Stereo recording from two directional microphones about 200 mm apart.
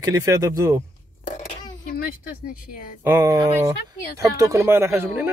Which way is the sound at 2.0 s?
45° left (ahead or behind).